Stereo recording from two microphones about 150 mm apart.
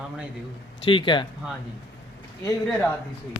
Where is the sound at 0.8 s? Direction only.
35° left (ahead or behind).